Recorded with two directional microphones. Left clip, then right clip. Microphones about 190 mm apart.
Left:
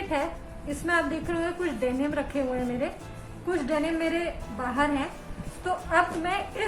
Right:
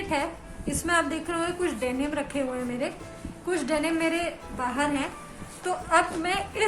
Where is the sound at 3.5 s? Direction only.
15° right (ahead or behind).